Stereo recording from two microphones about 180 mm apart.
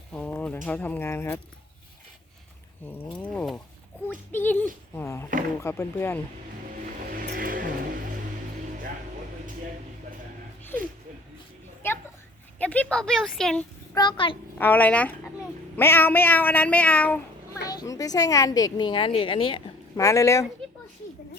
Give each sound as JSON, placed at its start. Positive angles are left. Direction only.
{"t": 0.1, "sound": "a sound", "side_deg": 10}
{"t": 0.6, "sound": "speech", "side_deg": 10}
{"t": 3.1, "sound": "speech", "side_deg": 5}
{"t": 7.3, "sound": "vehicle", "side_deg": -50}
{"t": 12.5, "sound": "speech", "side_deg": 10}
{"t": 13.9, "sound": "speech", "side_deg": 25}
{"t": 14.6, "sound": "speech", "side_deg": 10}
{"t": 17.6, "sound": "speech", "side_deg": 20}
{"t": 20.0, "sound": "speech", "side_deg": 15}